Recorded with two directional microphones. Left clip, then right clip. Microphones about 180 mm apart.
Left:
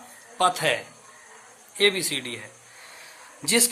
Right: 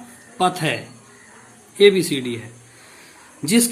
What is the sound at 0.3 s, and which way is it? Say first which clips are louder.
Speech: right 2 dB; 25° left (ahead or behind).